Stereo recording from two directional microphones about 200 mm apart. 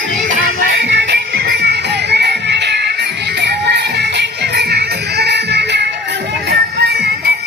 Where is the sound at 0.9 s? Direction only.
60° right (ahead or behind).